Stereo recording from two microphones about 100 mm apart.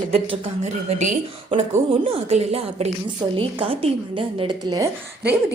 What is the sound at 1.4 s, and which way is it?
Speech, 70° right (ahead or behind).